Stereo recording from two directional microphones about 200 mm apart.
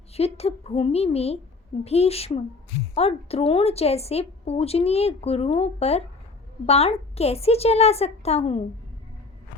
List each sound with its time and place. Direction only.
0.1 s a woman's voice: 30° left (ahead or behind)